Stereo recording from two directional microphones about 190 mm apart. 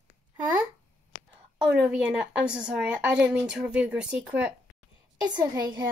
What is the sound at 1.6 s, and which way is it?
A woman's voice, 5° right (ahead or behind).